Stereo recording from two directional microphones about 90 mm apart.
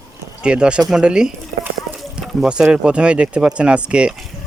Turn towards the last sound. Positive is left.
turn(degrees=-10)  # may be behind; listen again after turning